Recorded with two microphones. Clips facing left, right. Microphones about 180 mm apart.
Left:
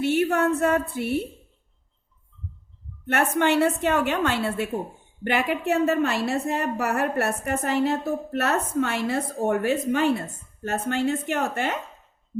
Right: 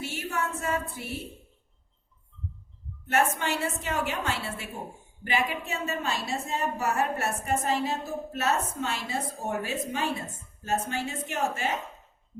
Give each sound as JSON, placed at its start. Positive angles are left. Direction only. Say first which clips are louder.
{"t": 0.0, "sound": "a woman's voice", "louder": "left 11 dB", "side_deg": 60}
{"t": 3.1, "sound": "a woman's voice", "louder": "left 5 dB", "side_deg": 60}